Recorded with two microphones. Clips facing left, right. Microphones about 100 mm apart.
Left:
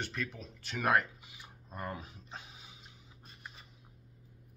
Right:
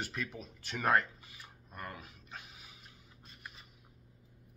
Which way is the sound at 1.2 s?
15° left (ahead or behind).